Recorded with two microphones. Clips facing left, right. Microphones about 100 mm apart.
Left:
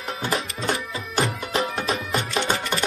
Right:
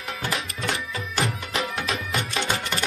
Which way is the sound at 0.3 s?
35° left (ahead or behind).